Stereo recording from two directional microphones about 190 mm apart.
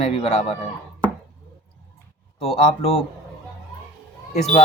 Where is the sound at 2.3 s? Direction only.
30° left (ahead or behind).